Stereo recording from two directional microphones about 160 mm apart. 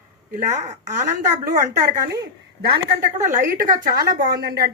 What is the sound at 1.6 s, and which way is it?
Speech, 60° right (ahead or behind).